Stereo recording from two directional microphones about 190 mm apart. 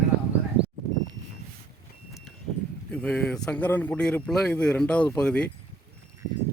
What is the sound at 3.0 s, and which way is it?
Speech, 5° left (ahead or behind).